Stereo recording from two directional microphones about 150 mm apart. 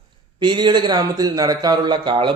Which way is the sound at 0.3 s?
30° right (ahead or behind).